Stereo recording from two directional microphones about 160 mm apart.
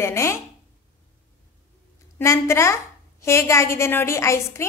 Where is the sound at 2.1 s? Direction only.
20° left (ahead or behind).